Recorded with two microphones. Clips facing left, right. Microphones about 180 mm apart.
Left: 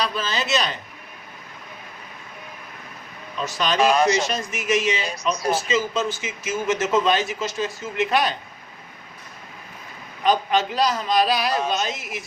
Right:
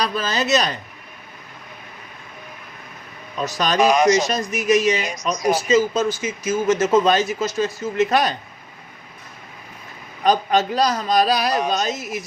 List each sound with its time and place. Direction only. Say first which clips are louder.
0.0 s speech: right 3 dB; 40° right (ahead or behind)
3.3 s speech: right 2 dB; 40° right (ahead or behind)
3.8 s speech: right 3 dB; 15° right (ahead or behind)
4.2 s speech: right 4 dB; 40° right (ahead or behind)
10.2 s speech: right 2 dB; 40° right (ahead or behind)